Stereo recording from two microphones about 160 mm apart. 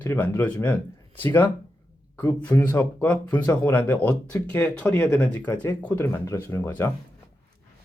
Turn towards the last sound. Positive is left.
turn(degrees=15)  # may be behind; listen again after turning